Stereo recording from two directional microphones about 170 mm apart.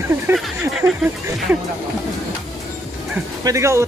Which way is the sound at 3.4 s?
15° right (ahead or behind).